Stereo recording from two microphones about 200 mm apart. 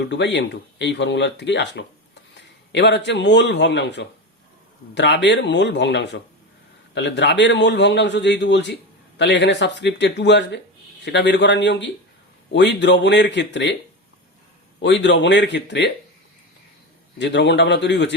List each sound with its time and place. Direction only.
0.0 s a man's voice: 60° left (ahead or behind)
14.8 s speech: 65° left (ahead or behind)
17.2 s speech: 60° left (ahead or behind)